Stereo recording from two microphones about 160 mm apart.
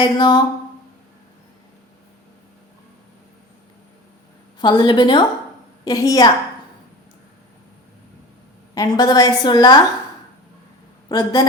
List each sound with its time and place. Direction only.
0.0 s a woman's voice: 25° left (ahead or behind)
4.6 s a woman's voice: 30° left (ahead or behind)
8.7 s a woman's voice: 25° left (ahead or behind)
11.1 s a woman's voice: 25° left (ahead or behind)